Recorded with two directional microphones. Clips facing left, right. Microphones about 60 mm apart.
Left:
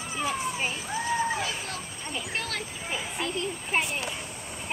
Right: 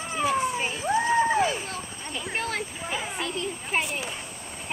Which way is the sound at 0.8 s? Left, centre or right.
Right.